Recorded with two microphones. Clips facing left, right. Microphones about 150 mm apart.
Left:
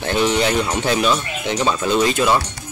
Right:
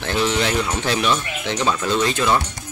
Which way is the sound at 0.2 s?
10° left (ahead or behind).